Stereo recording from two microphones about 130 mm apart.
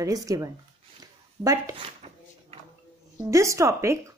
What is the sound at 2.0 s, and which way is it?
Drawer open or close, 55° right (ahead or behind).